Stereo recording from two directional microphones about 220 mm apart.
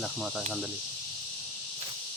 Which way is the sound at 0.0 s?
Centre (ahead or behind).